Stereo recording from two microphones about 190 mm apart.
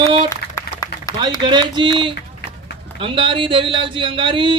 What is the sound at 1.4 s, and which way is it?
A man's voice, 25° right (ahead or behind).